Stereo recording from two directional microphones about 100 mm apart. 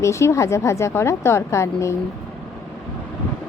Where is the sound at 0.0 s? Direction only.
30° left (ahead or behind).